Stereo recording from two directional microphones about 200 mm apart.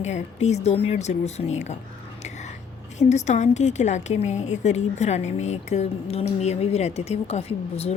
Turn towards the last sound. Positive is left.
turn(degrees=30)  # may be behind; listen again after turning